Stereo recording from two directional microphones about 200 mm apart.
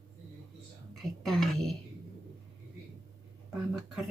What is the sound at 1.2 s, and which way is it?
Speech, centre (ahead or behind).